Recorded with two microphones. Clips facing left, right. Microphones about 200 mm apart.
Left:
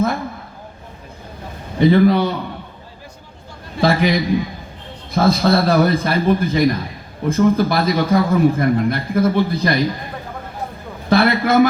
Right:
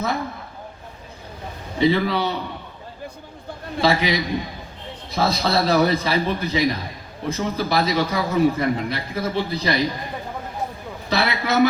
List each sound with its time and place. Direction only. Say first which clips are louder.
1.8 s a man's voice: left 6 dB; 50° left (ahead or behind)
3.8 s a man's voice: left 4 dB; 50° left (ahead or behind)
11.1 s a man's voice: left 7 dB; 50° left (ahead or behind)